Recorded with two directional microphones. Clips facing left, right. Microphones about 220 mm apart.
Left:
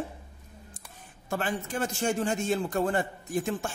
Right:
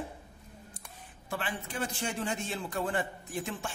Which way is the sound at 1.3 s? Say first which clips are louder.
Left 6 dB; 45° left (ahead or behind).